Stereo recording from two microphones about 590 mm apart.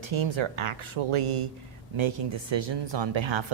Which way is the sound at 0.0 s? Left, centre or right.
Right.